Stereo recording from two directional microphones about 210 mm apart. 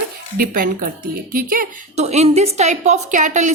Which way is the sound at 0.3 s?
45° right (ahead or behind).